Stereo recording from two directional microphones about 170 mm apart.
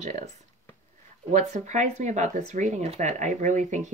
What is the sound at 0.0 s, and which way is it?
Speech, 40° right (ahead or behind).